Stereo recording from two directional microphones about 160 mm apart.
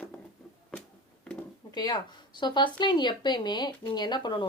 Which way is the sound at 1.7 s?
25° left (ahead or behind).